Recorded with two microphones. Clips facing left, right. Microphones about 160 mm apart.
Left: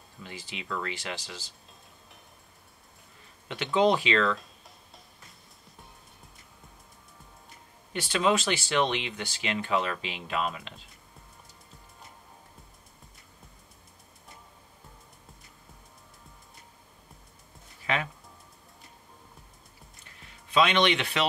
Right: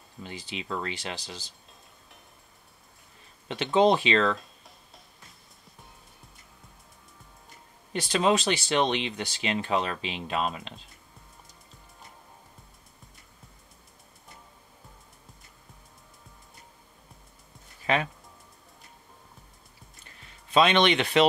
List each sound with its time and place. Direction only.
0.2 s speech: 30° right (ahead or behind)
3.4 s speech: 25° right (ahead or behind)
4.4 s a sound: centre (ahead or behind)
7.9 s speech: 35° right (ahead or behind)
20.5 s speech: 30° right (ahead or behind)